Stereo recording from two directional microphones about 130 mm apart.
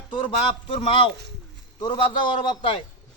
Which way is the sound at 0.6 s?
45° left (ahead or behind).